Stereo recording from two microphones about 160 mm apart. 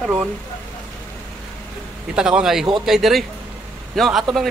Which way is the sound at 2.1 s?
5° right (ahead or behind).